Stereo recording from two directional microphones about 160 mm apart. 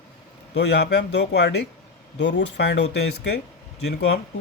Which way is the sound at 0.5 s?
90° left.